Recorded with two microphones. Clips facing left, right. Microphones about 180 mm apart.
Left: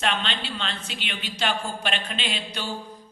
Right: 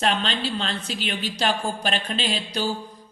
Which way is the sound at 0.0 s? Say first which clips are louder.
Right 4 dB; 40° right (ahead or behind).